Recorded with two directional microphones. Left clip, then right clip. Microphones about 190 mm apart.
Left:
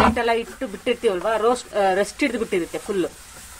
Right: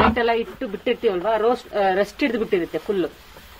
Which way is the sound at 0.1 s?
20° right (ahead or behind).